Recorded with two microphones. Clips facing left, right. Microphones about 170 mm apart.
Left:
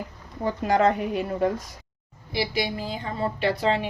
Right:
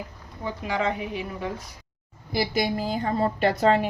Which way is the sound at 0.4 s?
45° left (ahead or behind).